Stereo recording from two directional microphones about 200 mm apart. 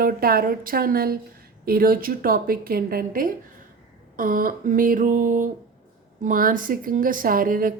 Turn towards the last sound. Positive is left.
turn(degrees=-45)  # may be behind; listen again after turning